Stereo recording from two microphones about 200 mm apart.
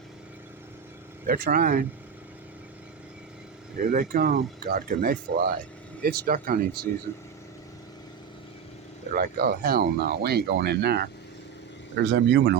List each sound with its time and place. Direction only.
1.3 s speech: 45° right (ahead or behind)
3.8 s speech: 45° right (ahead or behind)
9.1 s speech: 45° right (ahead or behind)
12.1 s speech: 60° right (ahead or behind)